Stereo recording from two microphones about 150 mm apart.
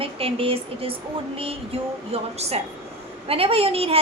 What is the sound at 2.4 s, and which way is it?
A woman's voice, 45° right (ahead or behind).